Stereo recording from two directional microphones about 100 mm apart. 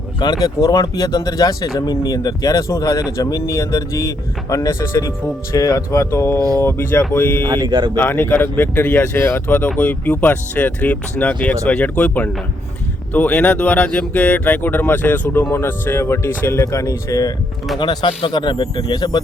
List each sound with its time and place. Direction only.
0.2 s speech: 40° left (ahead or behind); by 7.4 s 20° left (ahead or behind)
7.4 s speech: 45° right (ahead or behind)
7.9 s speech: 20° left (ahead or behind); by 17.3 s 35° left (ahead or behind)
17.7 s speech: 55° left (ahead or behind)
18.8 s speech: 45° left (ahead or behind)